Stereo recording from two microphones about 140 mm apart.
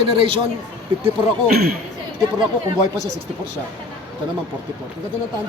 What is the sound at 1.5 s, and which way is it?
Speech, 90° right.